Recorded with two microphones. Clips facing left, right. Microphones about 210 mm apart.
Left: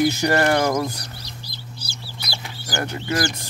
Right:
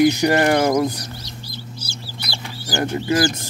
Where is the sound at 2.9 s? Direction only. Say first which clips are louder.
Right 6 dB; 30° right (ahead or behind).